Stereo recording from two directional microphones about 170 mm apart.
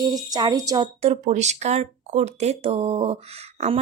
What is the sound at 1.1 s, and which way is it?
Speech, 40° right (ahead or behind).